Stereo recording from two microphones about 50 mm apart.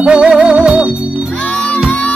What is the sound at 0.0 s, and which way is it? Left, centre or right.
Music, centre.